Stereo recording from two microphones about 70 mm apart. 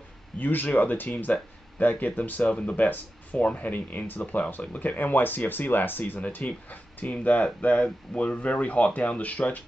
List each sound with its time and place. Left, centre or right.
0.4 s speech: left